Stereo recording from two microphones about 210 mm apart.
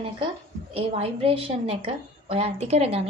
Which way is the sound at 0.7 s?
25° right (ahead or behind).